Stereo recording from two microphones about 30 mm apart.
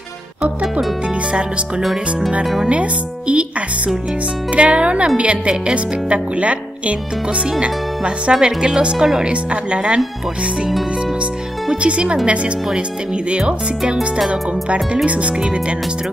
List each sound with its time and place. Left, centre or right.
1.8 s speech: centre
2.6 s speech: right
8.4 s speech: right
9.3 s speech: right
11.7 s speech: right
15.0 s speech: right